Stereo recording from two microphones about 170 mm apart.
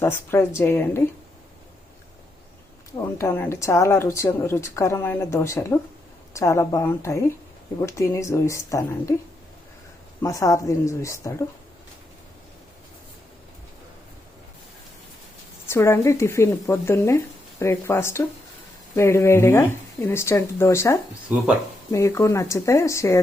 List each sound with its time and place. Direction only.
0.0 s a woman's voice: 15° left (ahead or behind)
3.2 s a woman's voice: 15° left (ahead or behind)
10.2 s a woman's voice: 20° left (ahead or behind)
15.7 s a woman's voice: 15° left (ahead or behind)
21.3 s speech: 10° right (ahead or behind)
21.9 s a woman's voice: 15° left (ahead or behind)